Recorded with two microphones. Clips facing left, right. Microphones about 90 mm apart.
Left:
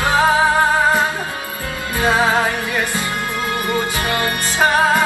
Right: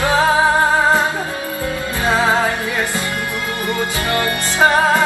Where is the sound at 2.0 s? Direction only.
20° left (ahead or behind).